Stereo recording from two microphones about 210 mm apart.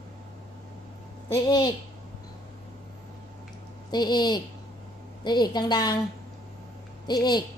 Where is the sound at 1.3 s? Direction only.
20° left (ahead or behind).